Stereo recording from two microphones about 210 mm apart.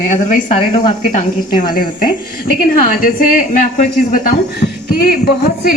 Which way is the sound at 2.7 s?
40° left (ahead or behind).